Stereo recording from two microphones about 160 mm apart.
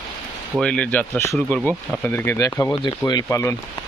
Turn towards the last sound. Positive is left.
turn(degrees=20)  # may be behind; listen again after turning